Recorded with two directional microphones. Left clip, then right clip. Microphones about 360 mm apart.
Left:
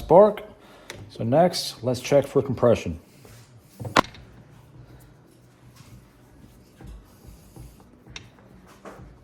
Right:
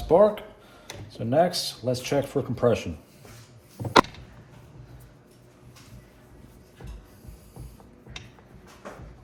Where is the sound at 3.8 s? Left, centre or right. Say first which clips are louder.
Right 2 dB; centre.